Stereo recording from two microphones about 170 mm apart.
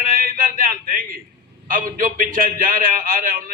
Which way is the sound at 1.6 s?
55° right (ahead or behind).